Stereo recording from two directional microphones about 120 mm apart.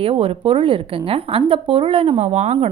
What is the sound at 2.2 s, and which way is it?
Speech, 70° right (ahead or behind).